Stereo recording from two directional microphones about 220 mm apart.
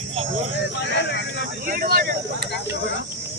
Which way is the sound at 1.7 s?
40° right (ahead or behind).